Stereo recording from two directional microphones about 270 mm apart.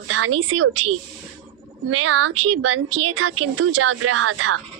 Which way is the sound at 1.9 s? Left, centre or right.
Right.